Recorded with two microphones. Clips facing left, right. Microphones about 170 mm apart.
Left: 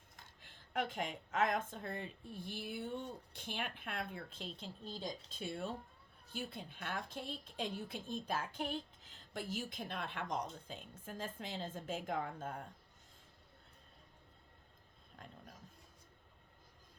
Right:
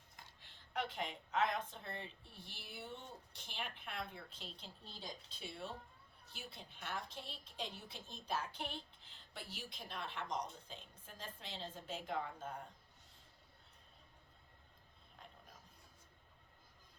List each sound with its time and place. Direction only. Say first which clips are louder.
0.4 s a woman's voice: left 3 dB; 50° left (ahead or behind)